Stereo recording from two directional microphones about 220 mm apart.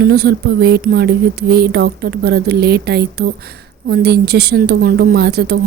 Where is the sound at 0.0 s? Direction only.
45° right (ahead or behind).